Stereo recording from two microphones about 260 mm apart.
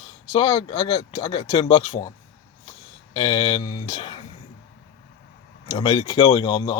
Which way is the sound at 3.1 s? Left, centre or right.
Centre.